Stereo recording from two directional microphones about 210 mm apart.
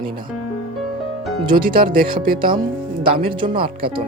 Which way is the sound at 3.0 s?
25° right (ahead or behind).